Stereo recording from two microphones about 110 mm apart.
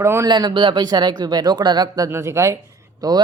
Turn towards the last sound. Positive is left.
turn(degrees=-35)  # may be behind; listen again after turning